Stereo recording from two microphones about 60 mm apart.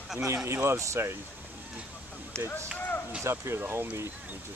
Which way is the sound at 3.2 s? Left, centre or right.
Right.